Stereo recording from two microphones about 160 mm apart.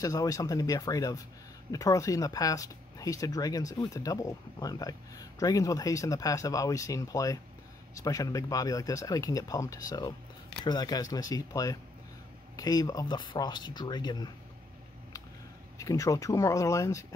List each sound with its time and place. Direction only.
0.0 s speech: 20° left (ahead or behind)
15.8 s speech: 20° left (ahead or behind)